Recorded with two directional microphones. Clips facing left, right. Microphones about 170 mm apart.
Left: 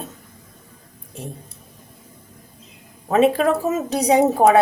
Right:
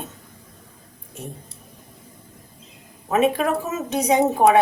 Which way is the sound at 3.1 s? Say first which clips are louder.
Left 3 dB; 30° left (ahead or behind).